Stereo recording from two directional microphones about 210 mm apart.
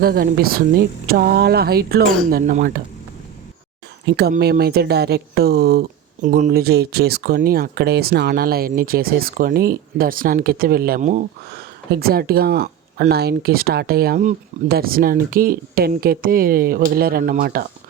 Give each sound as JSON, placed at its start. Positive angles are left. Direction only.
{"t": 0.0, "sound": "speech", "side_deg": -45}
{"t": 4.0, "sound": "speech", "side_deg": -50}